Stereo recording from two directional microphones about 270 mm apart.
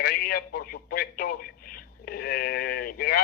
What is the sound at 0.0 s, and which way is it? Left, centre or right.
Speech, left.